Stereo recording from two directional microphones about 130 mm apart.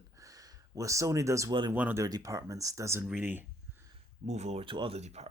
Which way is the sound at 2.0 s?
25° right (ahead or behind).